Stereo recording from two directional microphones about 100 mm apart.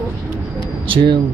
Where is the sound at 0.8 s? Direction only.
60° right (ahead or behind).